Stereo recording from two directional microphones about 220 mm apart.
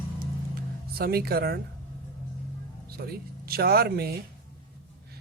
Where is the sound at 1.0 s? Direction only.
45° right (ahead or behind).